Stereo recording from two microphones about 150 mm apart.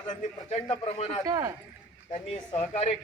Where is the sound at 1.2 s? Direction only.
25° right (ahead or behind).